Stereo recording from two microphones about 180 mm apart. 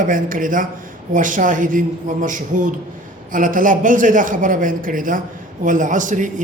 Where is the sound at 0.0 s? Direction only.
50° right (ahead or behind).